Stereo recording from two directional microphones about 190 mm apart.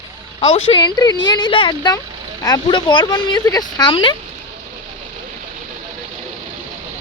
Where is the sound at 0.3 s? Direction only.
30° left (ahead or behind).